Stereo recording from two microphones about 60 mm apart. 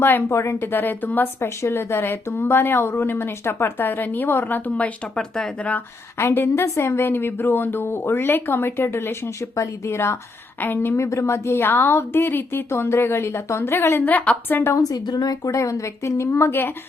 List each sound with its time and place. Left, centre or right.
0.0 s a woman's voice: left
0.3 s a woman's voice: left
1.6 s a woman's voice: left
5.1 s speech: centre
6.1 s a woman's voice: left
10.6 s a woman's voice: left
10.9 s a woman's voice: left
14.1 s a woman's voice: left
14.8 s speech: left